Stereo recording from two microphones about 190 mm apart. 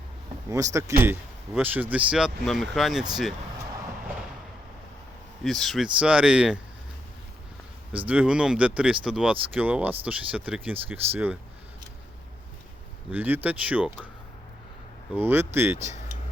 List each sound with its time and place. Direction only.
0.5 s speech: 15° right (ahead or behind)
5.4 s speech: centre (ahead or behind)
7.9 s speech: 5° right (ahead or behind)
13.1 s speech: 10° right (ahead or behind)
15.1 s speech: 10° right (ahead or behind)
15.8 s a sound: 40° right (ahead or behind)